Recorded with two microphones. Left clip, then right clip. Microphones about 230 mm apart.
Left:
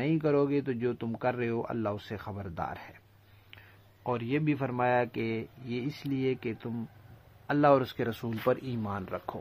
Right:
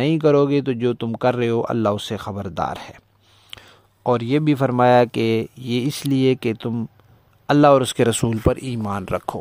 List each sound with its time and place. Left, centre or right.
0.0 s speech: right